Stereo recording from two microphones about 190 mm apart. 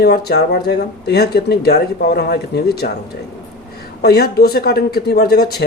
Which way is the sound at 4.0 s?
60° left (ahead or behind).